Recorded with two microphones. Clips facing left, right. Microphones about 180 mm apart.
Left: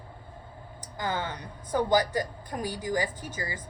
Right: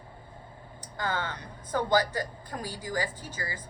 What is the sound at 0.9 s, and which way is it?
A woman's voice, 20° left (ahead or behind).